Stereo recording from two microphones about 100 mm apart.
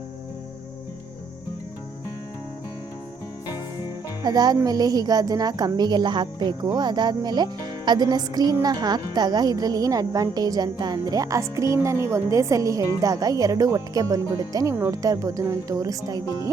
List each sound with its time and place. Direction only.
4.2 s a woman's voice: 40° right (ahead or behind)